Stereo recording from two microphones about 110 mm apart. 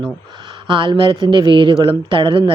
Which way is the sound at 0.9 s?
50° right (ahead or behind).